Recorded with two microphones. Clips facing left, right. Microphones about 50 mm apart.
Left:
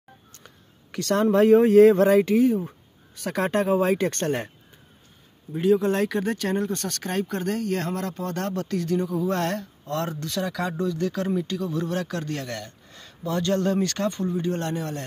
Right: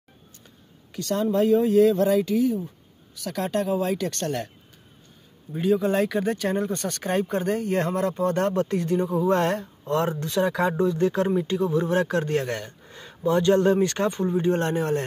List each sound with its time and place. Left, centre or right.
0.9 s speech: left
5.5 s speech: centre
10.4 s speech: right